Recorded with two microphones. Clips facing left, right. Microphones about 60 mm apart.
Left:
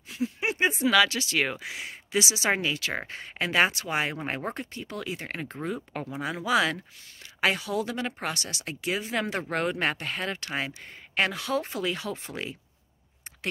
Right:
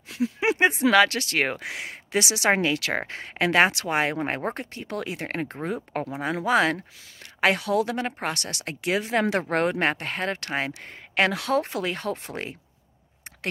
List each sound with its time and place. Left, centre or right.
0.1 s speech: right